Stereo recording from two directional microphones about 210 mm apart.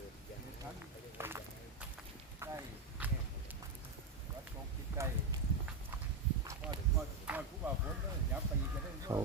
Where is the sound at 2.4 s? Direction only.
10° right (ahead or behind).